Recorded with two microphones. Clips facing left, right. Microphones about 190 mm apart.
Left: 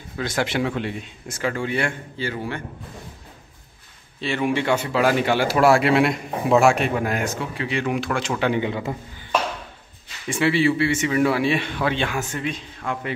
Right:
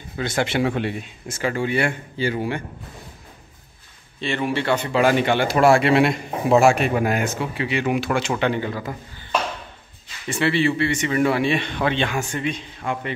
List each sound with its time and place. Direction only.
0.2 s speech: centre (ahead or behind)
2.1 s a man's voice: 15° right (ahead or behind)
4.2 s speech: 5° left (ahead or behind)
8.5 s a man's voice: 20° left (ahead or behind)
10.2 s speech: 10° left (ahead or behind)